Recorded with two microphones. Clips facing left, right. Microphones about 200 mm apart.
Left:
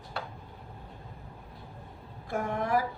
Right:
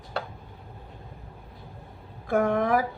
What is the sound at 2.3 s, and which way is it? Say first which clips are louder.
Female singing: right 6 dB; 70° right (ahead or behind).